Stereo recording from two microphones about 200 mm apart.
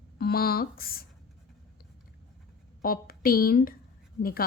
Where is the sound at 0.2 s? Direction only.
50° left (ahead or behind).